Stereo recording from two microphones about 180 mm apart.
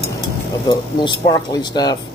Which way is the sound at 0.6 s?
25° left (ahead or behind).